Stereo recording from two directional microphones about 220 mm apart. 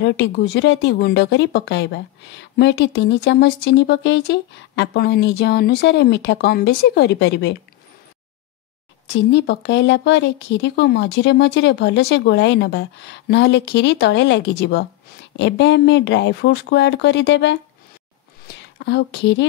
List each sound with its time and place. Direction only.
0.0 s speech: 55° left (ahead or behind)
9.1 s speech: 50° left (ahead or behind)
18.6 s speech: 50° left (ahead or behind)